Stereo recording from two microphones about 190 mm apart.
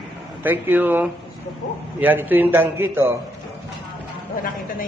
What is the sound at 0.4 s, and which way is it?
A man's voice, 10° right (ahead or behind).